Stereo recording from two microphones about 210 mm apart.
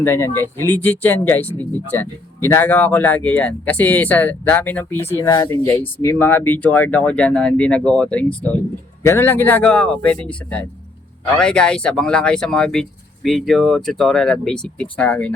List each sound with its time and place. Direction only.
0.0 s speech: 10° left (ahead or behind)